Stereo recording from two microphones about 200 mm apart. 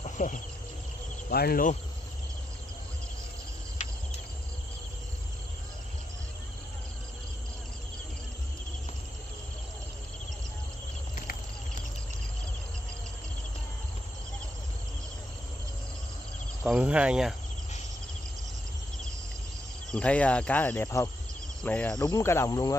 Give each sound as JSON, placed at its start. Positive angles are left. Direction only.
{"t": 0.0, "sound": "insect", "side_deg": 40}
{"t": 1.3, "sound": "cricket", "side_deg": 50}
{"t": 11.1, "sound": "cricket", "side_deg": 40}
{"t": 16.6, "sound": "cricket", "side_deg": -5}
{"t": 19.9, "sound": "speech", "side_deg": 5}